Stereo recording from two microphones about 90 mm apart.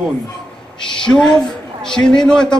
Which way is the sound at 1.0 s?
5° left (ahead or behind).